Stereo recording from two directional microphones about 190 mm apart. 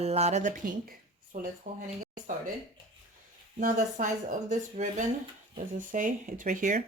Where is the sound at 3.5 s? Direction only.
40° right (ahead or behind).